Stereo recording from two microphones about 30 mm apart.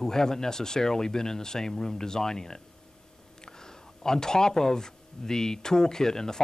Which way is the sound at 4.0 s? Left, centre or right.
Centre.